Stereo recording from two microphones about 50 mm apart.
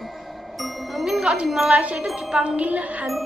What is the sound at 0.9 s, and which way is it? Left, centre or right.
Music, centre.